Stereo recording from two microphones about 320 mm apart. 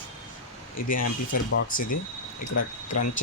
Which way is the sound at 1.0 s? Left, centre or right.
Left.